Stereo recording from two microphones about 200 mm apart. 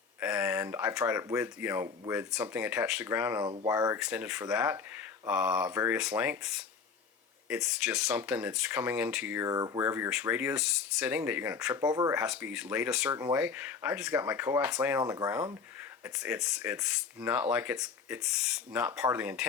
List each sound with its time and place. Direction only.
0.2 s speech: 5° right (ahead or behind)
3.4 s speech: 25° right (ahead or behind)
3.9 s speech: 5° right (ahead or behind)
12.1 s speech: 5° right (ahead or behind)
15.0 s speech: 15° right (ahead or behind)
16.1 s speech: 5° right (ahead or behind)